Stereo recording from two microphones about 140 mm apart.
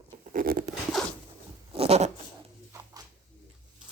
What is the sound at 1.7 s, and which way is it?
Goat, 45° right (ahead or behind).